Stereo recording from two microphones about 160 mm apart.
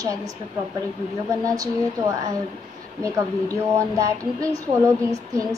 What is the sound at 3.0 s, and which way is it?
A woman's voice, 20° right (ahead or behind).